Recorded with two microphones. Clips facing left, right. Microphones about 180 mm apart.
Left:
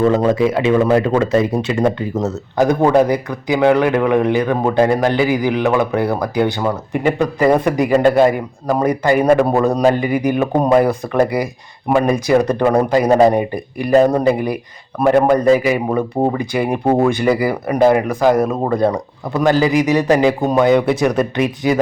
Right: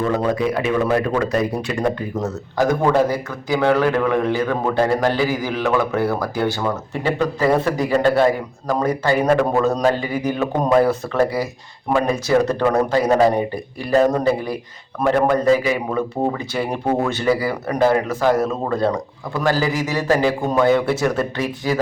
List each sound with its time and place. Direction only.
0.1 s speech: 25° left (ahead or behind)